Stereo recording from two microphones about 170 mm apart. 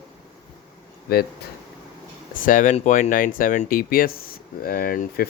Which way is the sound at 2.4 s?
50° left (ahead or behind).